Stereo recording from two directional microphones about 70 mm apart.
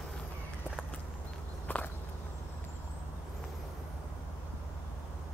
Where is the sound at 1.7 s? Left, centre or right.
Left.